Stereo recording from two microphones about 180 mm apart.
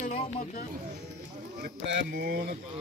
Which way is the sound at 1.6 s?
70° right (ahead or behind).